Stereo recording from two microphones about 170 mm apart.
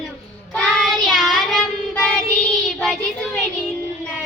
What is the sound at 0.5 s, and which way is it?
Child singing, 5° left (ahead or behind).